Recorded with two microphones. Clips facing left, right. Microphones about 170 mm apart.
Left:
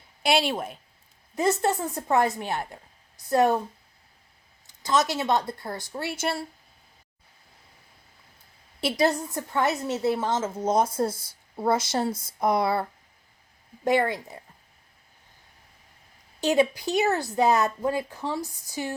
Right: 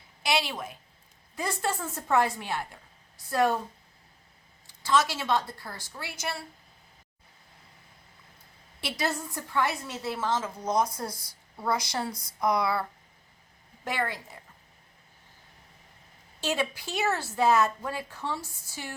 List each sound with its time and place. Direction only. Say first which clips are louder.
0.3 s a woman's voice: left 5 dB; 55° left (ahead or behind)
1.4 s speech: left 7 dB; 20° left (ahead or behind)
4.8 s speech: left 2 dB; 20° left (ahead or behind)
9.0 s speech: left 6 dB; 20° left (ahead or behind)
16.4 s speech: left 8 dB; 15° left (ahead or behind)